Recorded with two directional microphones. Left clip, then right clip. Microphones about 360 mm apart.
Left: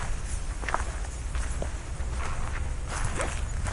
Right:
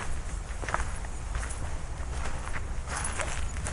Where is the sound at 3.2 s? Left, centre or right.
Centre.